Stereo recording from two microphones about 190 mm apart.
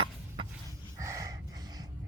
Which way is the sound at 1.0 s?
15° right (ahead or behind).